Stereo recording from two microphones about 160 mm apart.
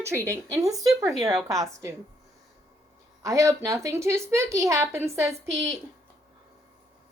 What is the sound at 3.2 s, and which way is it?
Speech, 20° right (ahead or behind).